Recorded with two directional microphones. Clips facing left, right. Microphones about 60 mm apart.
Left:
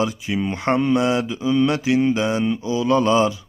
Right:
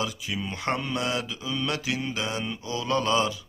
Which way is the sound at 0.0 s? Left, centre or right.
Left.